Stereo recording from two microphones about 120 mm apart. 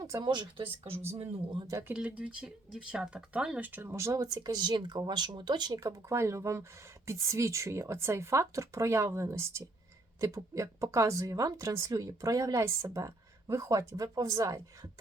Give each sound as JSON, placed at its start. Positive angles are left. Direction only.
{"t": 0.0, "sound": "speech", "side_deg": -35}
{"t": 1.9, "sound": "speech", "side_deg": -10}